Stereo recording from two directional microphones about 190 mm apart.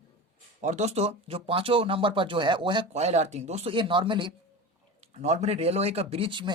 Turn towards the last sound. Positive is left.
turn(degrees=-25)  # may be behind; listen again after turning